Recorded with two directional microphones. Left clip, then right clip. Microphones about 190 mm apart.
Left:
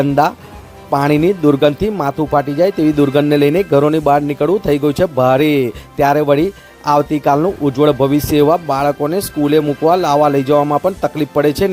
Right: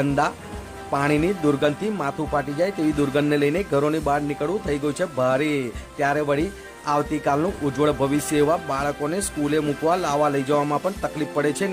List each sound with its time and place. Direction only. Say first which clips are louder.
0.0 s speech: left 9 dB; 35° left (ahead or behind)